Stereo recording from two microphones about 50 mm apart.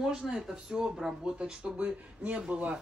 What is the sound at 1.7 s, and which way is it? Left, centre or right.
Speech, right.